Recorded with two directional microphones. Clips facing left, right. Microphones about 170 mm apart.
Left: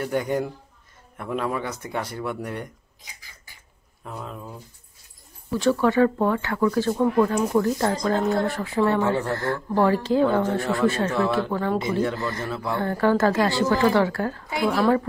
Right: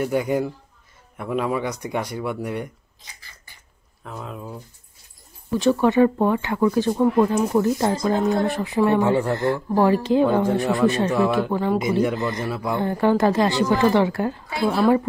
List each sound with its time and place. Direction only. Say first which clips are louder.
0.0 s speech: right 3 dB; 10° right (ahead or behind)
3.0 s beatboxing: right 1 dB; 10° left (ahead or behind)
4.0 s speech: right 1 dB; centre (ahead or behind)
5.6 s speech: right 2 dB; 20° right (ahead or behind)